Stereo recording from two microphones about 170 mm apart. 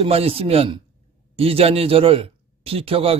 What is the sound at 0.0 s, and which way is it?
A man's voice, 35° right (ahead or behind).